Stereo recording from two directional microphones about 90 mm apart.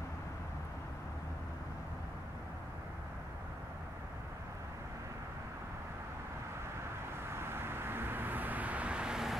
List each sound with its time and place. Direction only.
7.3 s vehicle: 25° right (ahead or behind); by 9.4 s 5° right (ahead or behind)